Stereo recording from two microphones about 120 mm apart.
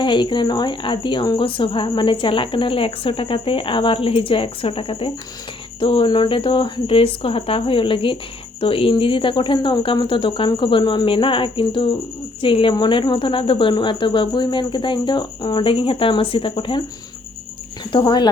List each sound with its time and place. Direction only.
0.0 s a woman's voice: 40° left (ahead or behind)
17.9 s speech: 40° left (ahead or behind)